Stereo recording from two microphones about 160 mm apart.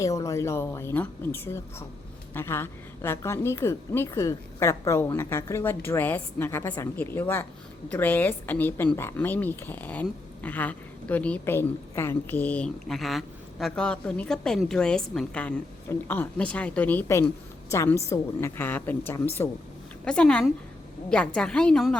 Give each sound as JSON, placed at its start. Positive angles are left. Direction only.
{"t": 0.0, "sound": "a woman's voice", "side_deg": 20}